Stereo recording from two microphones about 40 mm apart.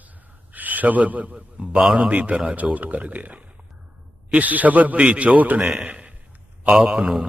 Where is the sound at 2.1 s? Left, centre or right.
Right.